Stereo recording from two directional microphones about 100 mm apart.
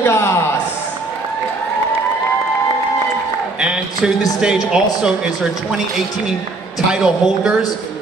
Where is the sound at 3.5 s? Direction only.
10° right (ahead or behind).